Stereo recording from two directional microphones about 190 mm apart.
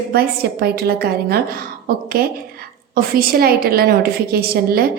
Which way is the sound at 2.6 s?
50° right (ahead or behind).